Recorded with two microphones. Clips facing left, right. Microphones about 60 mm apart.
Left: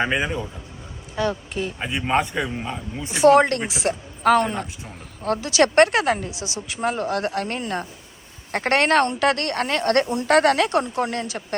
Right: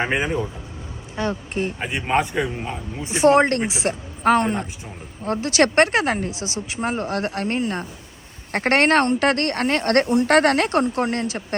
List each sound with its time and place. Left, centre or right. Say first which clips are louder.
0.2 s speech: right 2 dB; right
2.0 s speech: right 1 dB; centre
3.1 s a woman's voice: left 1 dB; right